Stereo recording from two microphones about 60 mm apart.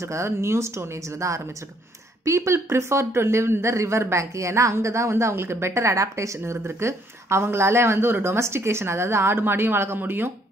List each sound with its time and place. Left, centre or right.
0.0 s speech: right